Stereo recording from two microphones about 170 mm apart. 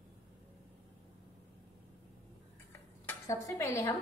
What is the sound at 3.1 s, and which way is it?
Speech, 15° left (ahead or behind).